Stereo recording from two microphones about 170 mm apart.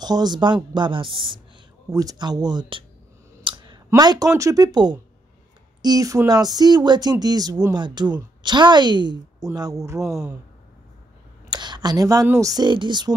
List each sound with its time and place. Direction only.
0.0 s speech: 25° right (ahead or behind)
3.4 s a sound: 25° right (ahead or behind)
3.9 s speech: 20° right (ahead or behind)
9.9 s speech: centre (ahead or behind)
11.5 s speech: 25° right (ahead or behind)